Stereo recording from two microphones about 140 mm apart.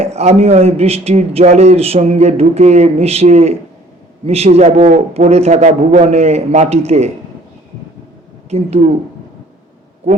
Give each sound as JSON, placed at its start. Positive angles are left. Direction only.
{"t": 0.0, "sound": "a man's voice", "side_deg": -50}
{"t": 8.4, "sound": "a man's voice", "side_deg": -50}